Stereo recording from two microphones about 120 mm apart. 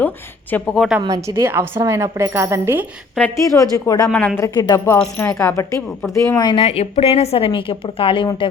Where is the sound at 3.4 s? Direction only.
25° left (ahead or behind).